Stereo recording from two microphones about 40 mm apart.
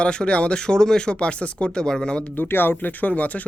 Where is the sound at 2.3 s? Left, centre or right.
Left.